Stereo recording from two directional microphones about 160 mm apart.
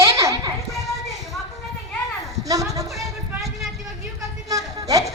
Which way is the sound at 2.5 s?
20° right (ahead or behind).